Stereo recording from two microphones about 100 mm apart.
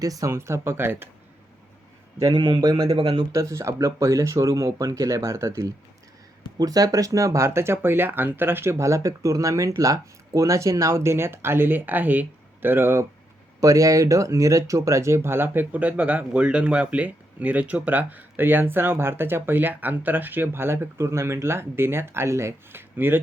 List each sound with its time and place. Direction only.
0.0 s speech: 35° right (ahead or behind)
2.1 s a man's voice: 40° right (ahead or behind)
3.3 s speech: 30° right (ahead or behind)
13.6 s speech: 35° right (ahead or behind)